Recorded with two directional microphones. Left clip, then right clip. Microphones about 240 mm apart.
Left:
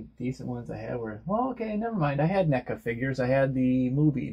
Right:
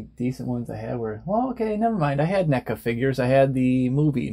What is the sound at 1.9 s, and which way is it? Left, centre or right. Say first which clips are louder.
Speech: right 4 dB; right.